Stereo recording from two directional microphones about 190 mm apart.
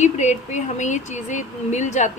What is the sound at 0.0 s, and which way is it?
Speech, 40° left (ahead or behind).